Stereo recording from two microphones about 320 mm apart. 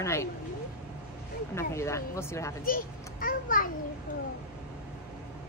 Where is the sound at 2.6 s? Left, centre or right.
Left.